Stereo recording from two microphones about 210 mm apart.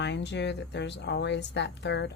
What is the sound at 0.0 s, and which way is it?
Speech, 55° left (ahead or behind).